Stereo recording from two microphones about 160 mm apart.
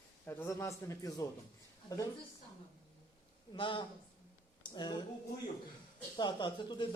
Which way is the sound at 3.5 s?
30° left (ahead or behind).